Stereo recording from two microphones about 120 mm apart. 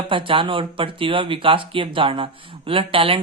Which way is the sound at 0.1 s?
45° right (ahead or behind).